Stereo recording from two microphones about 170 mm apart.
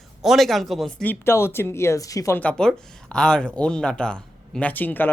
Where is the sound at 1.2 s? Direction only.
15° left (ahead or behind).